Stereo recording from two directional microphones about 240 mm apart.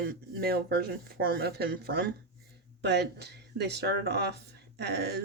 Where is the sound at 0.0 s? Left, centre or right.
Right.